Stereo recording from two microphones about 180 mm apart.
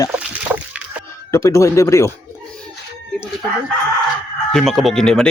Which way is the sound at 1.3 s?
15° left (ahead or behind).